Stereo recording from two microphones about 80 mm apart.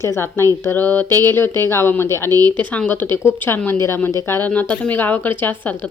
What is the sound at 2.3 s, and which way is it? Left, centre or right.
Speech, right.